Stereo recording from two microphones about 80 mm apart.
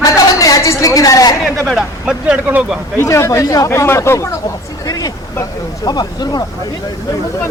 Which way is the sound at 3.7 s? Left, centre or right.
Left.